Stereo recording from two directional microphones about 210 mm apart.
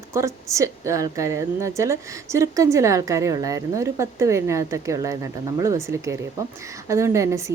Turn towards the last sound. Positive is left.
turn(degrees=-15)  # may be behind; listen again after turning